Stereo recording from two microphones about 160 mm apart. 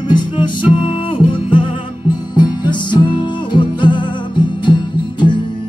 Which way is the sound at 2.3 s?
30° left (ahead or behind).